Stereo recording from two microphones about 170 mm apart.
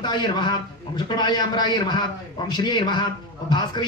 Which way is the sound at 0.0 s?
25° left (ahead or behind).